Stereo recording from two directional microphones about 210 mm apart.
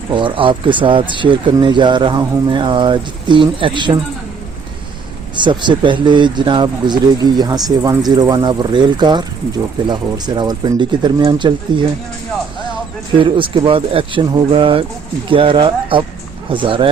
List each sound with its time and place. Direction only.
0.1 s speech: 25° right (ahead or behind)
5.4 s speech: 20° right (ahead or behind)
13.1 s speech: 25° right (ahead or behind)